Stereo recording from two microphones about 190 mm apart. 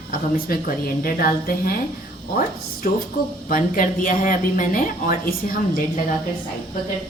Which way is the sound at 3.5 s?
45° left (ahead or behind).